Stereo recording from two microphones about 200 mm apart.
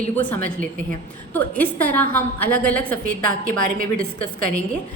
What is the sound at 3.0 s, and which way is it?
A woman's voice, 40° right (ahead or behind).